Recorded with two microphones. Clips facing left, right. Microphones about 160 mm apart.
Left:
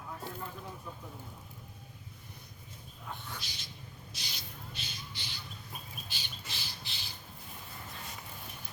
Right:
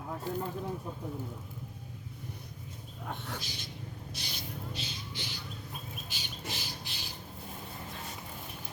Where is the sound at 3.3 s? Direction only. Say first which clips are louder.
Right 5 dB; 45° right (ahead or behind).